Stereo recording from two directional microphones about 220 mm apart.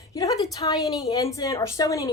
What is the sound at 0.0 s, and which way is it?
A woman's voice, 15° left (ahead or behind).